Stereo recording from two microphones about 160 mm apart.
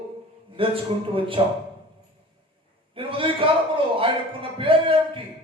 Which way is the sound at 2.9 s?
35° right (ahead or behind).